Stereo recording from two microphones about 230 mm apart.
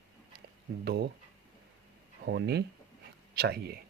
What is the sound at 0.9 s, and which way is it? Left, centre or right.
Speech, right.